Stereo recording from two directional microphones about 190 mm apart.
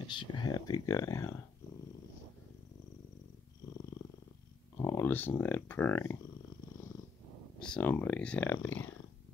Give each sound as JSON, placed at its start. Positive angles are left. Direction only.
{"t": 0.0, "sound": "speech", "side_deg": 25}
{"t": 4.7, "sound": "a sound", "side_deg": 15}
{"t": 5.4, "sound": "speech", "side_deg": 10}
{"t": 7.6, "sound": "speech", "side_deg": 5}